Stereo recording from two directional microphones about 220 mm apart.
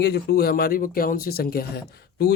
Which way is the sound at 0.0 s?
45° left (ahead or behind).